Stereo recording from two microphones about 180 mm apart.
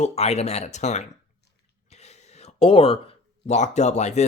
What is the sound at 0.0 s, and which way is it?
Speech, 35° left (ahead or behind).